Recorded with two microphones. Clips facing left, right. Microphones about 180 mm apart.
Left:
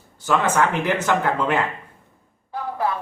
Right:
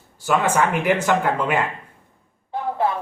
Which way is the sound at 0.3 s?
10° right (ahead or behind).